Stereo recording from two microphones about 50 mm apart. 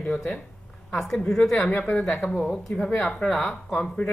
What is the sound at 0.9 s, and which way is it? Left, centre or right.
Speech, centre.